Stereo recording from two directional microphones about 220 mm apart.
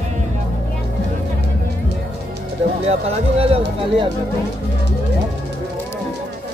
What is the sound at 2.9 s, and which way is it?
Speech, 30° right (ahead or behind).